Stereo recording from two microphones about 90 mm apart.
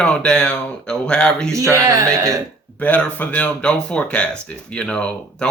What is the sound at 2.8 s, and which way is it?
Speech, 15° left (ahead or behind).